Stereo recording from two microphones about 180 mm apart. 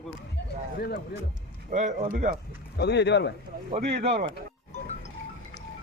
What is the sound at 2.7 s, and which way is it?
Speech, 70° left (ahead or behind).